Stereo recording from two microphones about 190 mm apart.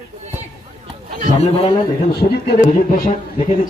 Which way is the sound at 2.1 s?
60° left (ahead or behind).